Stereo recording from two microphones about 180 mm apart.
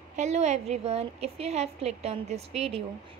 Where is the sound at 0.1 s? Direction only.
40° right (ahead or behind).